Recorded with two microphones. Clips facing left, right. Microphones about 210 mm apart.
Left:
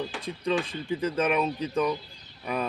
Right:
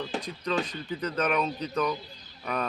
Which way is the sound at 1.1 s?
5° left (ahead or behind).